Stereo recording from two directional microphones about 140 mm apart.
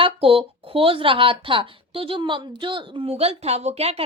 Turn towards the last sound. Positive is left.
turn(degrees=-45)  # may be behind; listen again after turning